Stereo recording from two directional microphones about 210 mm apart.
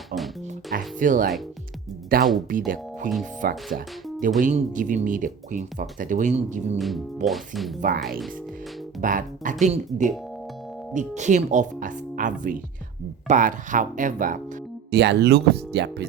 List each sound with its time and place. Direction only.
0.9 s speech: 40° right (ahead or behind)
6.7 s speech: centre (ahead or behind)
7.8 s speech: 45° right (ahead or behind)
14.8 s speech: 50° right (ahead or behind)